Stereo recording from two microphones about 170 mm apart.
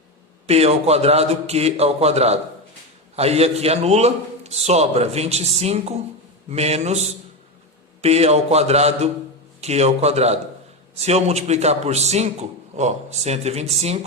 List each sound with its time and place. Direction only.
0.4 s a man's voice: 40° right (ahead or behind)